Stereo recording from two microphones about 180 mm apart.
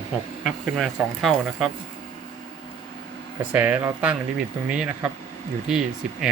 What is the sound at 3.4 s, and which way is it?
Speech, 10° right (ahead or behind).